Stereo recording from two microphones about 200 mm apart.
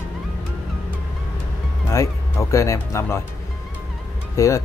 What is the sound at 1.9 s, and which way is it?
Speech, 15° left (ahead or behind).